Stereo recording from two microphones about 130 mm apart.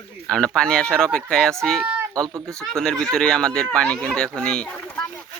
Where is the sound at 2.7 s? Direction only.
Centre (ahead or behind).